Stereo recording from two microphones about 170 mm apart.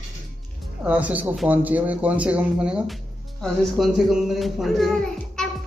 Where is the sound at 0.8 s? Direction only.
10° right (ahead or behind).